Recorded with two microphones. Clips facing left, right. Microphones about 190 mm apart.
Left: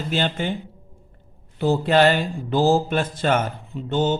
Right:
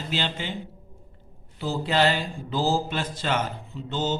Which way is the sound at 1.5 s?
60° left (ahead or behind).